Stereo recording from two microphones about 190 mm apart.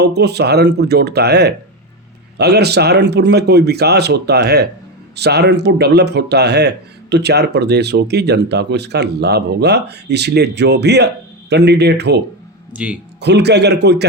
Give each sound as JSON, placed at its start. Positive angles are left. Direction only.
{"t": 0.0, "sound": "speech", "side_deg": -60}
{"t": 12.7, "sound": "speech", "side_deg": -5}
{"t": 13.2, "sound": "speech", "side_deg": -60}